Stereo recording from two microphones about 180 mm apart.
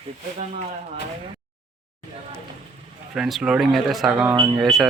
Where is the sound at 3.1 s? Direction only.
5° right (ahead or behind).